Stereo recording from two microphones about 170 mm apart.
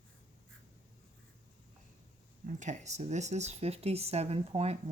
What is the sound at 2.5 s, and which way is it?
Speech, 45° right (ahead or behind).